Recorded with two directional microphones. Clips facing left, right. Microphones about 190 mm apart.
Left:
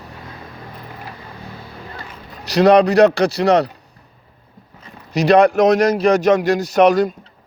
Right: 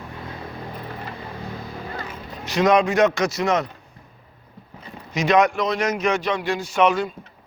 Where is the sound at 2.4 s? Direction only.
35° left (ahead or behind).